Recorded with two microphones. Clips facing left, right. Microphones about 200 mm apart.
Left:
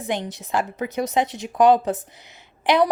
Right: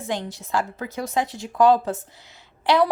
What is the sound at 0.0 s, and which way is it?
A woman's voice, 20° left (ahead or behind).